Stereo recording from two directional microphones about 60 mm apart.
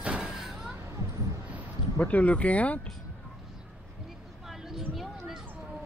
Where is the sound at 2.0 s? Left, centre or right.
Left.